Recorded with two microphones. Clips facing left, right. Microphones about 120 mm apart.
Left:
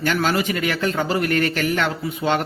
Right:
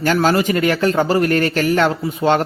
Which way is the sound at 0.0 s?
40° right (ahead or behind).